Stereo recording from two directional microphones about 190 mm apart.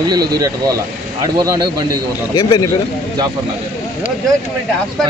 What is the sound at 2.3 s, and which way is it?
Speech, 20° left (ahead or behind).